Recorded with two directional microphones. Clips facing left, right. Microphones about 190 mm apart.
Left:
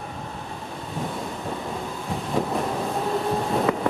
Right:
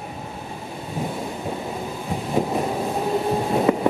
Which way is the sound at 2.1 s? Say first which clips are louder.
Right 3 dB; 10° right (ahead or behind).